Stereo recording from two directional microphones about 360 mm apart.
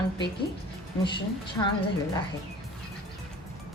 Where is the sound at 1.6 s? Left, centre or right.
Centre.